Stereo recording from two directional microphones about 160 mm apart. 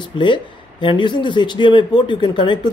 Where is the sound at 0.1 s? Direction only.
30° left (ahead or behind).